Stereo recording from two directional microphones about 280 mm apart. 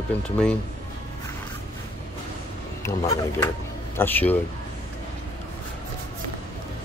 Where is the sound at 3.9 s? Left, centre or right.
Centre.